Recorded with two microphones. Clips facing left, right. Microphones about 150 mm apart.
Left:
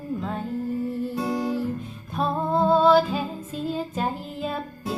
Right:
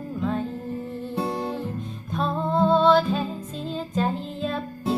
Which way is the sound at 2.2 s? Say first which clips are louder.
Even; 5° left (ahead or behind).